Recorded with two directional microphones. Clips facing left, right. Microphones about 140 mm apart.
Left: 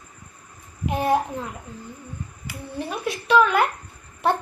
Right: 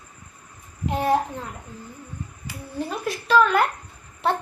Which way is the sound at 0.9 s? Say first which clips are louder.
Even; 15° left (ahead or behind).